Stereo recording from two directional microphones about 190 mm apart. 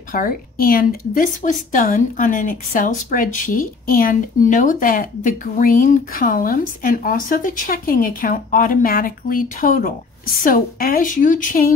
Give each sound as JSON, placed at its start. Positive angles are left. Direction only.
{"t": 0.1, "sound": "a woman's voice", "side_deg": 45}